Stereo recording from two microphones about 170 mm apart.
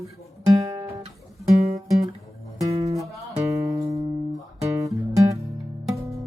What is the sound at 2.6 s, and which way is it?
Music, 20° right (ahead or behind).